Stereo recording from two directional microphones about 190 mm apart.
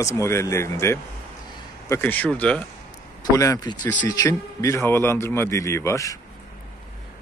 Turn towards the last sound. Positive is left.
turn(degrees=15)  # may be behind; listen again after turning